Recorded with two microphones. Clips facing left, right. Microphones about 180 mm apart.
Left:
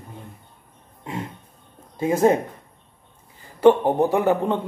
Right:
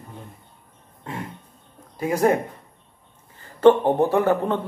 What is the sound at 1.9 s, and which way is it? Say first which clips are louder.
Speech: left 2 dB; 25° left (ahead or behind).